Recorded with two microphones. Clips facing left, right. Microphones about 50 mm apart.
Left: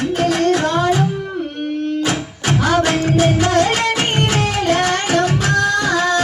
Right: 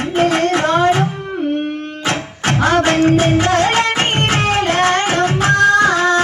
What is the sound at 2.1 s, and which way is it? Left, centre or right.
Music, right.